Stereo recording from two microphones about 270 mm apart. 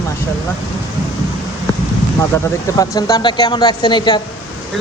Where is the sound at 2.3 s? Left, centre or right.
Centre.